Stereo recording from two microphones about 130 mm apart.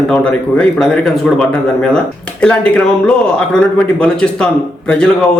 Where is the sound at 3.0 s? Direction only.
10° left (ahead or behind).